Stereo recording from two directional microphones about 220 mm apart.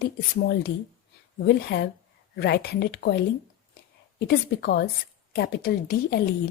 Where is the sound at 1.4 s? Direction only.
50° left (ahead or behind).